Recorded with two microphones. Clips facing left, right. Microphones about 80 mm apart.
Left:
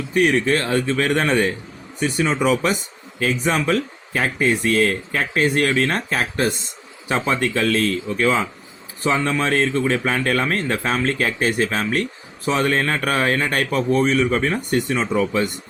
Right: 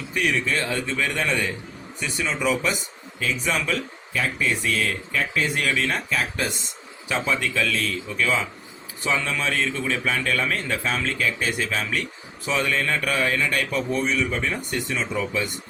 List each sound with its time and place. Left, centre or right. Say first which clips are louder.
0.1 s speech: left 7 dB; left